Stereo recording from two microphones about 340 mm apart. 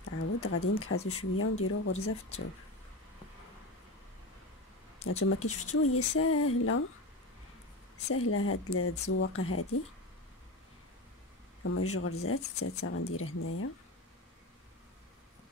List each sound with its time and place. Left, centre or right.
0.0 s speech: left
5.2 s speech: left
8.1 s speech: left
11.7 s speech: left